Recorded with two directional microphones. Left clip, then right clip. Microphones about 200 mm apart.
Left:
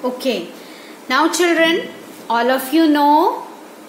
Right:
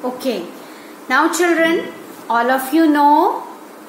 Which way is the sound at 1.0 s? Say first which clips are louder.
Right 1 dB; 15° left (ahead or behind).